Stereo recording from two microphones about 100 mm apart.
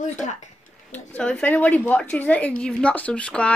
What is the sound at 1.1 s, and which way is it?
A woman's voice, 15° left (ahead or behind).